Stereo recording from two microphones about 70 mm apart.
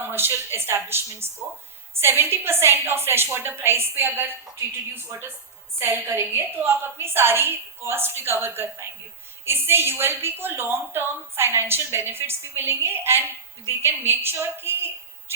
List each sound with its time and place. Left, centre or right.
0.0 s a woman's voice: right
5.8 s a woman's voice: right